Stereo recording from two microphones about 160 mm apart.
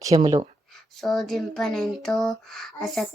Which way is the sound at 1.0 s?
Centre (ahead or behind).